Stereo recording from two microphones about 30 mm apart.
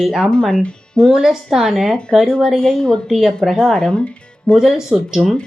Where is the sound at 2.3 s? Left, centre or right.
Left.